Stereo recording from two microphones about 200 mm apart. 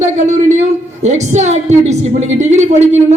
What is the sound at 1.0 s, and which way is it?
A woman's voice, 35° right (ahead or behind).